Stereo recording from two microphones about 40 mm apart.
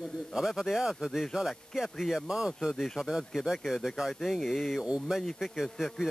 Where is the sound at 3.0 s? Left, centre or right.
Centre.